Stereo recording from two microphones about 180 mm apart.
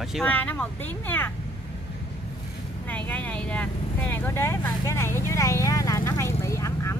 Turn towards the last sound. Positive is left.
turn(degrees=15)  # may be behind; listen again after turning